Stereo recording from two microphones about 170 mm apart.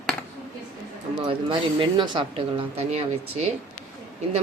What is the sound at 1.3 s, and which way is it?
A woman's voice, 30° right (ahead or behind).